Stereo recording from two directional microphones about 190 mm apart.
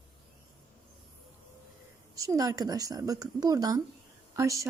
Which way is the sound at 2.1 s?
15° right (ahead or behind).